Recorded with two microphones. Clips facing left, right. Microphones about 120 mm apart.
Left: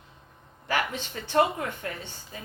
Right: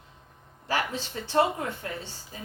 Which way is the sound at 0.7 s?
30° right (ahead or behind).